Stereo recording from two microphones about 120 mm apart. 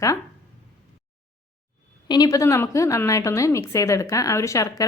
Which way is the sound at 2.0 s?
35° left (ahead or behind).